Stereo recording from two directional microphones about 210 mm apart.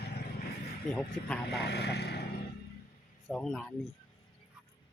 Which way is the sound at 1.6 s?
50° left (ahead or behind).